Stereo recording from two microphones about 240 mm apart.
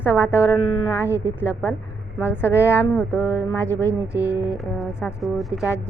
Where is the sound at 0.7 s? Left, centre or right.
Centre.